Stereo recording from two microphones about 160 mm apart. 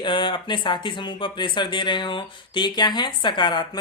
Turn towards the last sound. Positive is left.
turn(degrees=30)  # may be behind; listen again after turning